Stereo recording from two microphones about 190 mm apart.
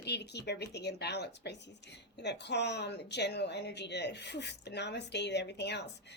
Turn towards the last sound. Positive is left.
turn(degrees=65)  # may be behind; listen again after turning